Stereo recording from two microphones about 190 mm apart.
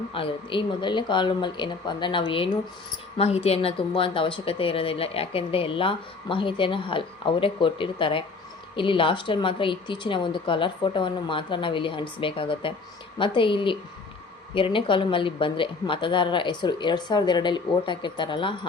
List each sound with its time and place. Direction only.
0.1 s speech: 25° left (ahead or behind)